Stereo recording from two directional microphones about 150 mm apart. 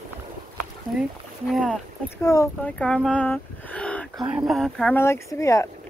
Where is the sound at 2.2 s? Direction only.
20° left (ahead or behind).